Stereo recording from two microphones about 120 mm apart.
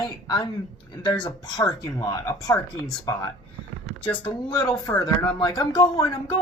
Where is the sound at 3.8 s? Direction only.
10° left (ahead or behind).